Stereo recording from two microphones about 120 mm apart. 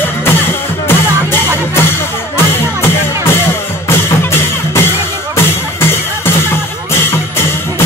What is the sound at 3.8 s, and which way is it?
Music, 20° left (ahead or behind).